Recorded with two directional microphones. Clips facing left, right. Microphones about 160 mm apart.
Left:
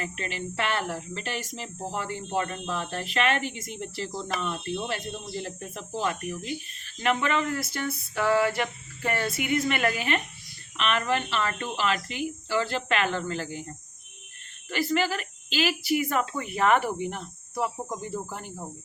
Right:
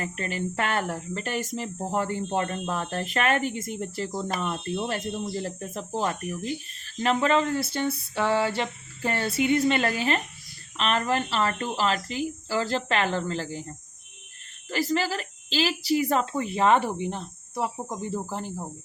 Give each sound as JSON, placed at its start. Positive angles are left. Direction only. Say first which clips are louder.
{"t": 0.0, "sound": "speech", "louder": "right 3 dB", "side_deg": -45}
{"t": 14.7, "sound": "speech", "louder": "even", "side_deg": -35}